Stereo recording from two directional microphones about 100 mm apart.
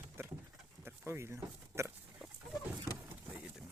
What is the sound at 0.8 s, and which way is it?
Oink, 25° right (ahead or behind).